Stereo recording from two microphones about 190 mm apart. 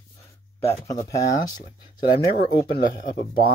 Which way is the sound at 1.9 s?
50° left (ahead or behind).